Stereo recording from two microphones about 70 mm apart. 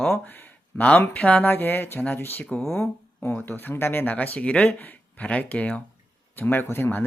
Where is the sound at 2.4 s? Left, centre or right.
Centre.